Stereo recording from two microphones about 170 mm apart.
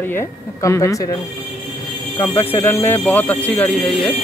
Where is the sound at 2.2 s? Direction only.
10° left (ahead or behind).